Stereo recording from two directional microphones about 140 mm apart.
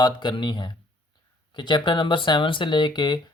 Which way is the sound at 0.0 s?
30° left (ahead or behind).